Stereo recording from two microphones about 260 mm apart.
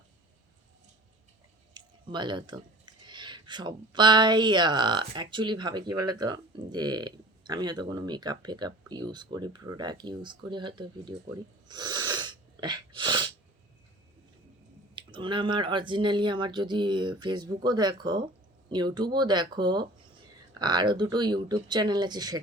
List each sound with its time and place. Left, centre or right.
1.7 s speech: centre
14.9 s speech: centre